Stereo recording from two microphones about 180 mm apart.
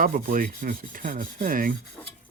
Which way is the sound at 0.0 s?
50° right (ahead or behind).